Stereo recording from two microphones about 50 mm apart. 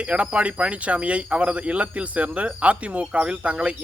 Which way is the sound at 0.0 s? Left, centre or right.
Right.